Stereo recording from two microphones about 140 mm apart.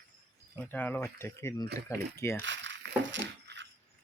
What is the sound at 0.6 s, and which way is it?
Speech, 15° left (ahead or behind).